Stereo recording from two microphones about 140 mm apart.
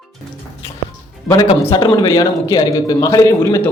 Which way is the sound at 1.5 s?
35° left (ahead or behind).